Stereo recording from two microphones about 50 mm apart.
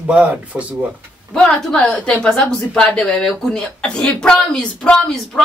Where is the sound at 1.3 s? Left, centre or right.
Centre.